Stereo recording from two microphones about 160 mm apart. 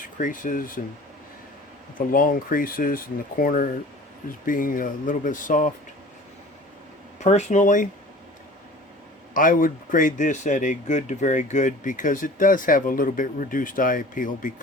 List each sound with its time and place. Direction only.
0.2 s speech: 55° left (ahead or behind)
2.0 s speech: 60° left (ahead or behind)
7.2 s speech: 45° left (ahead or behind)
9.3 s speech: 60° left (ahead or behind)